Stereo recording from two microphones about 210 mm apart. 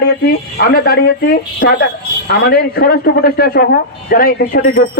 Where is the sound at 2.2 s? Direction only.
50° left (ahead or behind).